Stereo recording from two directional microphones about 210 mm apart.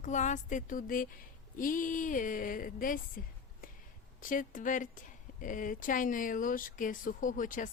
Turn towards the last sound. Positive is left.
turn(degrees=40)  # may be behind; listen again after turning